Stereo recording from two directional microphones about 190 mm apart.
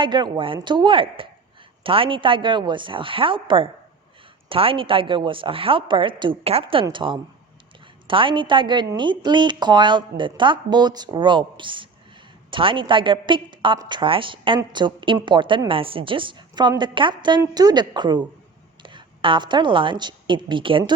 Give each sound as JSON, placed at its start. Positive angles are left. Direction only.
{"t": 0.0, "sound": "a woman's voice", "side_deg": -25}